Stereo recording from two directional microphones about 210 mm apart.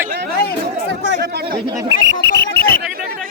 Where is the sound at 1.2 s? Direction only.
50° right (ahead or behind).